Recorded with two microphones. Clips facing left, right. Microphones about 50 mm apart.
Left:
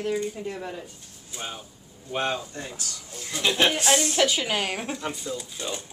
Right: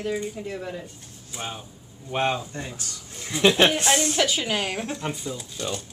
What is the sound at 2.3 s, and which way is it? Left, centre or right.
Speech, centre.